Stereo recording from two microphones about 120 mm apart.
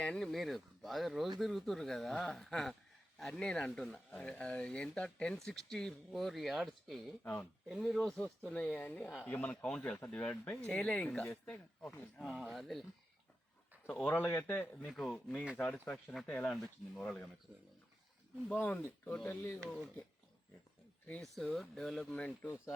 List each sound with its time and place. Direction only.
0.0 s speech: 5° left (ahead or behind)
12.2 s speech: centre (ahead or behind)
13.8 s speech: 10° left (ahead or behind)
14.8 s speech: centre (ahead or behind)
15.5 s speech: 15° left (ahead or behind)
18.6 s speech: 15° left (ahead or behind)
21.1 s speech: 5° left (ahead or behind)